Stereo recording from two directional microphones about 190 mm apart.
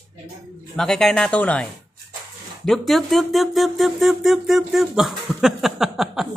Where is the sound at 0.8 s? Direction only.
5° left (ahead or behind).